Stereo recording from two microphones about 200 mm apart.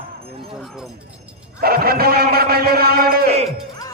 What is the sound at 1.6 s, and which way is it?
A man's voice, 50° right (ahead or behind).